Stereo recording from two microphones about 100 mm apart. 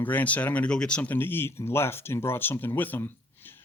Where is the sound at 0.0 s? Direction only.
15° left (ahead or behind).